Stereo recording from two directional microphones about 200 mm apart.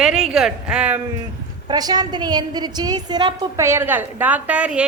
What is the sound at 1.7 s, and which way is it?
A woman's voice, 20° right (ahead or behind).